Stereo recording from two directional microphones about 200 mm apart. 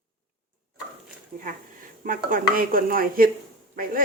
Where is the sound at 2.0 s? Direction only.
45° right (ahead or behind).